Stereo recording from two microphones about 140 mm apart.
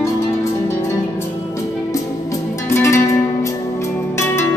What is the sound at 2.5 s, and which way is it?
Music, 20° left (ahead or behind).